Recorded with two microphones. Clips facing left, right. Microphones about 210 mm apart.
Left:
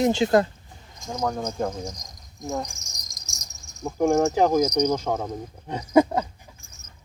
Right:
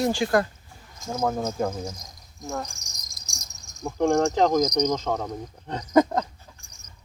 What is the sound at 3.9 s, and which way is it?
Speech, 5° left (ahead or behind).